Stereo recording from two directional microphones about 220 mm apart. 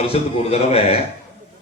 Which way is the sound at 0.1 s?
25° left (ahead or behind).